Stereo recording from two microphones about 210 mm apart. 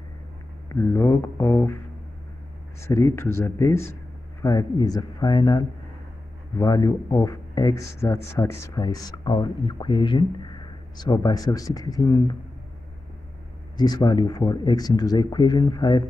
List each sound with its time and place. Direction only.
0.7 s speech: 15° left (ahead or behind)
2.8 s speech: 15° left (ahead or behind)
13.7 s speech: 20° left (ahead or behind)